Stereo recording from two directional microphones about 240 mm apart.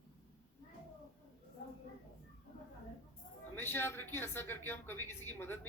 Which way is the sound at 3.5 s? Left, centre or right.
Centre.